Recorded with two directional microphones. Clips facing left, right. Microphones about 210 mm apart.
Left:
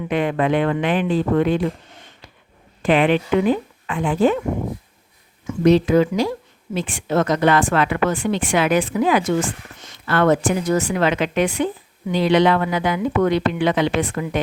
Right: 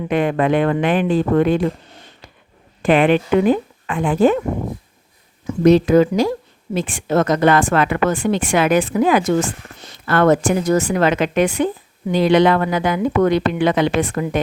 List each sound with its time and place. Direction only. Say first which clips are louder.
0.1 s a woman's voice: right 2 dB; 45° right (ahead or behind)
2.8 s a woman's voice: right 3 dB; 50° right (ahead or behind)
5.5 s a woman's voice: right 3 dB; 45° right (ahead or behind)